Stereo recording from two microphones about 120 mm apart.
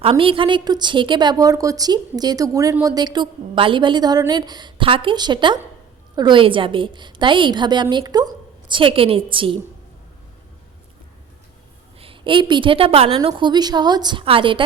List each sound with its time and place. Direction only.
0.0 s a woman's voice: 45° right (ahead or behind)
11.9 s a woman's voice: 45° right (ahead or behind)